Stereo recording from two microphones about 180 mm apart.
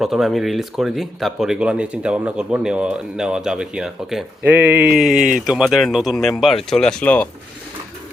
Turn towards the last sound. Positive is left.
turn(degrees=5)  # may be behind; listen again after turning